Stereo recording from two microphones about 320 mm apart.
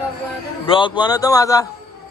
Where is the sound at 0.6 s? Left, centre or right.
Centre.